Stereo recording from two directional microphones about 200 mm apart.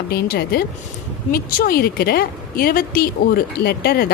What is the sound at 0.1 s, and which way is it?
A woman's voice, 50° left (ahead or behind).